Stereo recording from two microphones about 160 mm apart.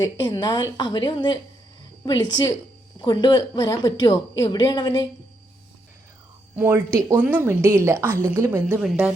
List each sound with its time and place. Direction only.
0.2 s a woman's voice: 25° left (ahead or behind)
6.6 s a woman's voice: 10° right (ahead or behind)